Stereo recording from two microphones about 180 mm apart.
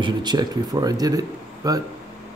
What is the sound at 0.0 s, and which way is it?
Speech, 25° right (ahead or behind).